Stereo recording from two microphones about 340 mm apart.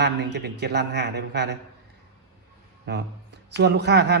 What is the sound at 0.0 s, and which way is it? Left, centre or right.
Speech, right.